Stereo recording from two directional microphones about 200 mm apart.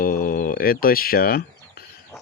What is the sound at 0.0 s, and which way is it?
Speech, 45° left (ahead or behind).